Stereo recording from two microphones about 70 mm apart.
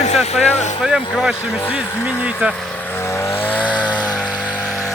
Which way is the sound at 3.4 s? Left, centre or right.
Left.